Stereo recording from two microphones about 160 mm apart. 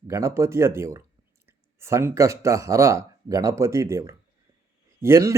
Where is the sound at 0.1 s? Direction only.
20° right (ahead or behind).